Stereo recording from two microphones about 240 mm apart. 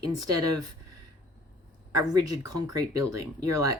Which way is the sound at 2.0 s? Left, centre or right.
Centre.